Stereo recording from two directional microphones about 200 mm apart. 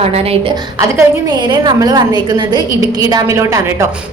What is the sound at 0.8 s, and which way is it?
A woman's voice, 20° right (ahead or behind).